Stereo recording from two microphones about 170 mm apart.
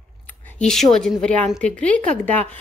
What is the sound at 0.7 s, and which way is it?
A woman's voice, centre (ahead or behind).